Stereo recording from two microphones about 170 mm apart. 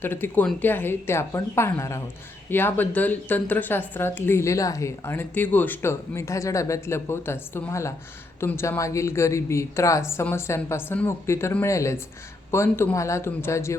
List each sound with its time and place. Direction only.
0.0 s speech: 10° left (ahead or behind)